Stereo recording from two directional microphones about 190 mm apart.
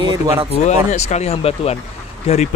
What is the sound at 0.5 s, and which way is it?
Speech, 35° left (ahead or behind).